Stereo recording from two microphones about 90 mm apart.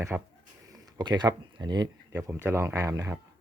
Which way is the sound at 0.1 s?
15° right (ahead or behind).